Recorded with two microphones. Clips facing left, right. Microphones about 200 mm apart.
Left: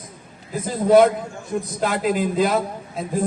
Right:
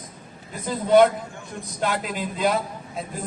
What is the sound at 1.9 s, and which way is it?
Speech, 50° left (ahead or behind).